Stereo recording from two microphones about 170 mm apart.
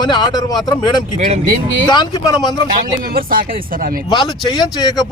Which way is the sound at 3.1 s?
60° right (ahead or behind).